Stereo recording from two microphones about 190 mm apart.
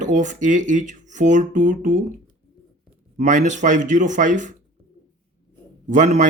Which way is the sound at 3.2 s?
40° right (ahead or behind).